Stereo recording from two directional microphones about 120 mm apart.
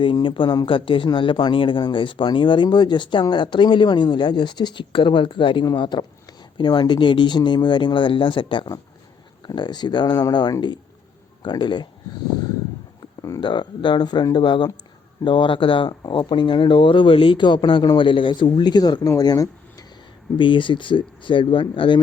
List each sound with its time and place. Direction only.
0.0 s speech: 45° left (ahead or behind)
13.4 s speech: 40° left (ahead or behind)
20.4 s speech: 45° left (ahead or behind)